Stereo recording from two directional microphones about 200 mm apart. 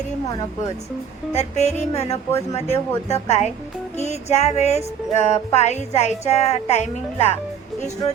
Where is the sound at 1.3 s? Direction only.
35° left (ahead or behind).